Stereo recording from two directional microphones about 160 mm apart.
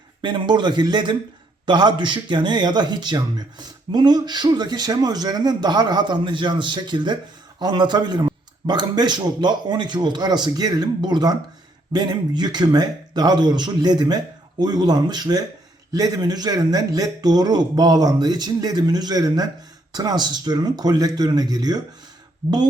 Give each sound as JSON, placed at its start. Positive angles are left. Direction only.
{"t": 0.2, "sound": "a man's voice", "side_deg": -30}